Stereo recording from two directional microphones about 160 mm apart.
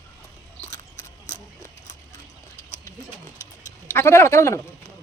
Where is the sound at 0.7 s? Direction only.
20° left (ahead or behind).